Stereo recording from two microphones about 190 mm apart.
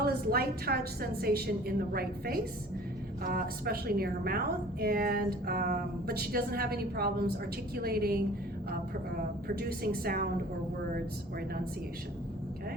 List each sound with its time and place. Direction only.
0.0 s a woman's voice: 55° right (ahead or behind)
9.6 s a woman's voice: 55° right (ahead or behind)